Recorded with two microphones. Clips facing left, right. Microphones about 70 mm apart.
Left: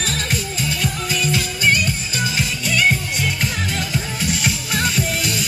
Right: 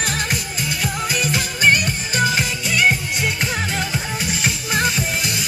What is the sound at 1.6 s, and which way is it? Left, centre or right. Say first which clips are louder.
Music: right 3 dB; right.